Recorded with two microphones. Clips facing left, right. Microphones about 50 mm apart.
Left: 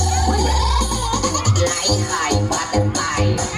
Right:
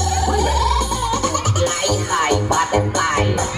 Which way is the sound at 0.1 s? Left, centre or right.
Centre.